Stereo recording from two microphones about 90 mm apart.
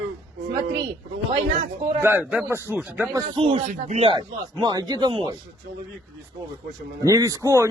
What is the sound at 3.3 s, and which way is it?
Speech, 70° right (ahead or behind).